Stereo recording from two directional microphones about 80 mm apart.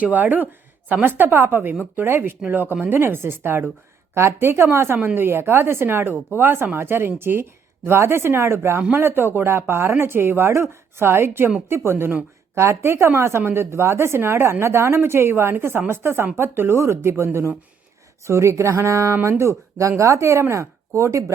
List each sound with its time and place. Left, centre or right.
0.0 s a woman's voice: right